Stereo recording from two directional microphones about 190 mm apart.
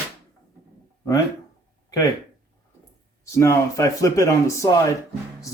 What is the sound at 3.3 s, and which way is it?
A man's voice, 15° left (ahead or behind).